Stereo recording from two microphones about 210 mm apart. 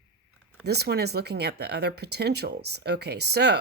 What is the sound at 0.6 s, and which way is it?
Speech, 50° right (ahead or behind).